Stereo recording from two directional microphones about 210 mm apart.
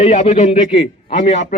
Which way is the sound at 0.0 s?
30° left (ahead or behind).